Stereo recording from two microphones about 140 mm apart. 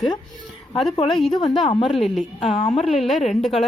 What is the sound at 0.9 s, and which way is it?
Speech, 40° left (ahead or behind).